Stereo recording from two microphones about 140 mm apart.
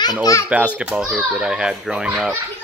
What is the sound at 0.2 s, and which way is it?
Speech, 25° left (ahead or behind).